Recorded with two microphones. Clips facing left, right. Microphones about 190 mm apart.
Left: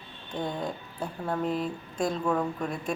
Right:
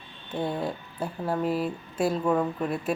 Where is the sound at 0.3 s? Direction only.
5° right (ahead or behind).